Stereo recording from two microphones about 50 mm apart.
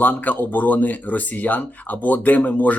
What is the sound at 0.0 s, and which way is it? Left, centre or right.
Speech, left.